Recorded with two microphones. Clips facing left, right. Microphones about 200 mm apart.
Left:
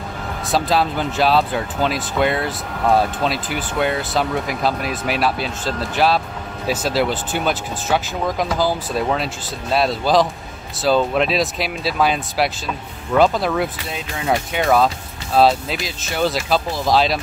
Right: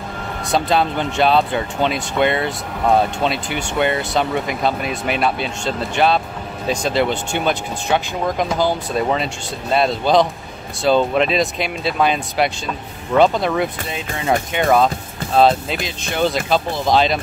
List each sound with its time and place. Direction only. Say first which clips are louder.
0.5 s speech: right 1 dB; centre (ahead or behind)